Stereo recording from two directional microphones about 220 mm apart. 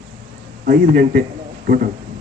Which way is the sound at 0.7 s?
40° right (ahead or behind).